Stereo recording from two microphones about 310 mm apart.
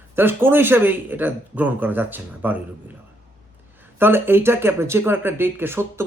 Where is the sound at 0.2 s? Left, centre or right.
Centre.